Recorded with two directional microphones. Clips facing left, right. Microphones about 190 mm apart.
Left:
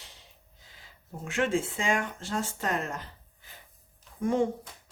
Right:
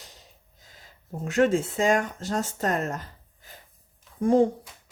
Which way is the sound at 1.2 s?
40° right (ahead or behind).